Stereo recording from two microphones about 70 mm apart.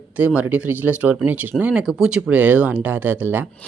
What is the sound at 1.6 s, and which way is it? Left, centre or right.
Speech, centre.